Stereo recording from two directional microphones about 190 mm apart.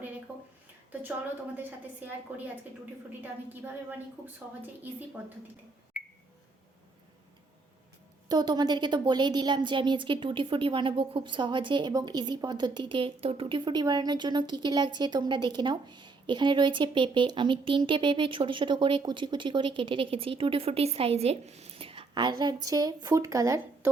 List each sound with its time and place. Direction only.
0.3 s a sound: 10° right (ahead or behind)
3.2 s a woman's voice: 10° right (ahead or behind)
8.3 s a woman's voice: 20° right (ahead or behind)